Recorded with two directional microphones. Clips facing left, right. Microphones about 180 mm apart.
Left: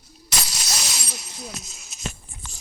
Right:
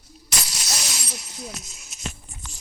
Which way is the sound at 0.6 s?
90° left.